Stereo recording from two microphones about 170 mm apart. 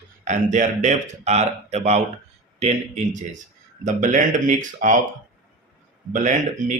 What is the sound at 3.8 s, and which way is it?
Speech, 45° right (ahead or behind).